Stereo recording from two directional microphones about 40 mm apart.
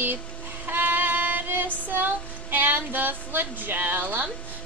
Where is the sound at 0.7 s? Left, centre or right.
Right.